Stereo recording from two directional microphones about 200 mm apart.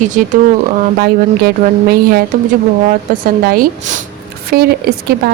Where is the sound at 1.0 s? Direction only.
50° right (ahead or behind).